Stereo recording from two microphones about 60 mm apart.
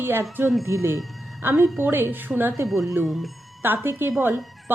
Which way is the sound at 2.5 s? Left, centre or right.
Right.